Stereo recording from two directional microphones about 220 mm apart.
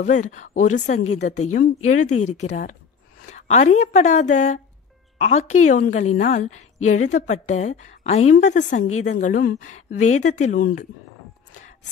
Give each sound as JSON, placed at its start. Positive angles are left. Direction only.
{"t": 0.0, "sound": "speech", "side_deg": 35}